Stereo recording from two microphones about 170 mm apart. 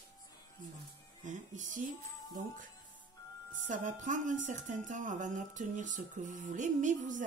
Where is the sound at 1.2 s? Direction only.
45° right (ahead or behind).